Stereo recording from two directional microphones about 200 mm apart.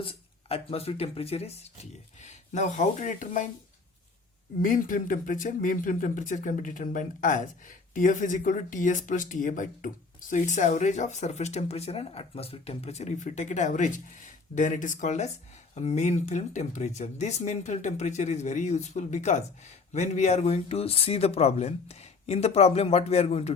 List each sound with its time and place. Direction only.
0.0 s speech: 30° left (ahead or behind)
4.6 s speech: 45° left (ahead or behind)